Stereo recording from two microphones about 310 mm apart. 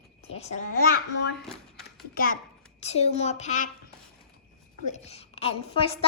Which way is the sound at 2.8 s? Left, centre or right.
Centre.